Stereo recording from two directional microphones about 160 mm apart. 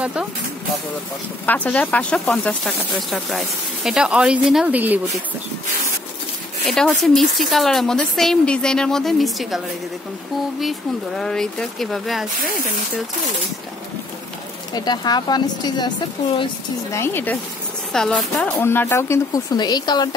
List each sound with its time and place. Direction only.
0.0 s speech: 5° right (ahead or behind)
1.4 s speech: 10° left (ahead or behind); by 5.2 s 10° right (ahead or behind)
6.6 s speech: centre (ahead or behind)
11.1 s speech: centre (ahead or behind)
14.7 s speech: 25° left (ahead or behind)
16.9 s speech: 15° left (ahead or behind)